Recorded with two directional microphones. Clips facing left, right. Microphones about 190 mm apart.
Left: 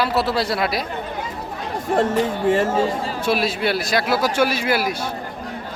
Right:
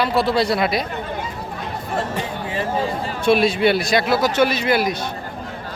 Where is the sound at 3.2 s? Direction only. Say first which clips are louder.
Right 6 dB; centre (ahead or behind).